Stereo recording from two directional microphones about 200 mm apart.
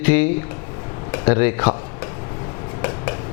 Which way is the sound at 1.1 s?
10° left (ahead or behind).